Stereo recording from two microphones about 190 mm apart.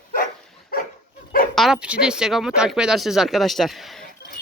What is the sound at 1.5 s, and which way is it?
Speech, centre (ahead or behind).